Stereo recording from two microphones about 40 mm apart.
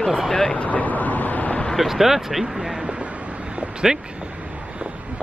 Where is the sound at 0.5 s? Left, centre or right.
Left.